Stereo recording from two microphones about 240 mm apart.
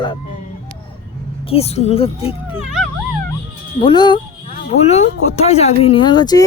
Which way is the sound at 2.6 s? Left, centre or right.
Centre.